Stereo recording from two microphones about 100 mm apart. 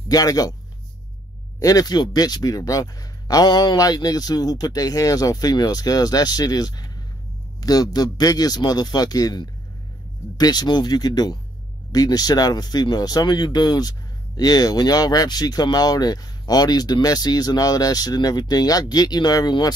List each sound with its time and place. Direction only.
0.1 s speech: 40° left (ahead or behind)
1.6 s speech: 35° left (ahead or behind)